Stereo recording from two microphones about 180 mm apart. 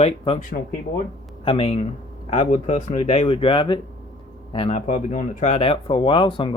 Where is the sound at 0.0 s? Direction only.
35° left (ahead or behind).